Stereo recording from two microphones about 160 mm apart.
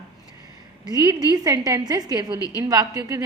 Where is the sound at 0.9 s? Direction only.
25° right (ahead or behind).